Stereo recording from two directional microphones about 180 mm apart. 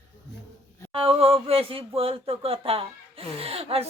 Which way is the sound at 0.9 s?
30° right (ahead or behind).